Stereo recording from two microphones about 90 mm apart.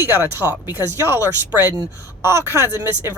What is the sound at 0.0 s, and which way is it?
Speech, 25° right (ahead or behind).